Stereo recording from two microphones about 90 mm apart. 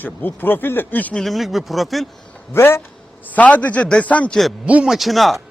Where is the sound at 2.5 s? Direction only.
25° left (ahead or behind).